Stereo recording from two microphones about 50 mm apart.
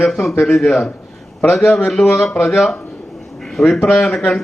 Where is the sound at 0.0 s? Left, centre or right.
Centre.